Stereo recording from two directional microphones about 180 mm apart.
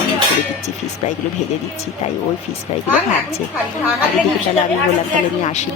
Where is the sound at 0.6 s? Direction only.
40° left (ahead or behind).